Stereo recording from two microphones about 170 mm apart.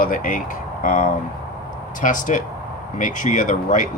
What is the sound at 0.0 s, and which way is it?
Speech, 55° left (ahead or behind).